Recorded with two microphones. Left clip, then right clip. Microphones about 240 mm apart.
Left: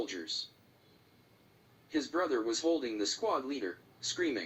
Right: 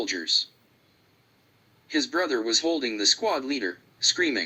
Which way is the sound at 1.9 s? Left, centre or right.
Right.